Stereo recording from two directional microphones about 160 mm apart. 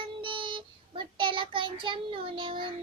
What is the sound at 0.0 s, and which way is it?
Child singing, 30° right (ahead or behind).